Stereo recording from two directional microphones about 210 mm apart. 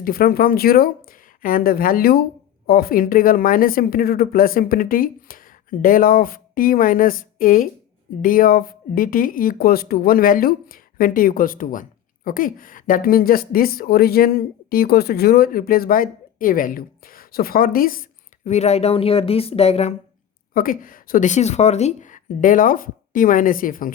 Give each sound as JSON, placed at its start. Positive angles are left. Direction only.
{"t": 0.0, "sound": "speech", "side_deg": 45}
{"t": 18.4, "sound": "speech", "side_deg": 30}
{"t": 20.5, "sound": "speech", "side_deg": 40}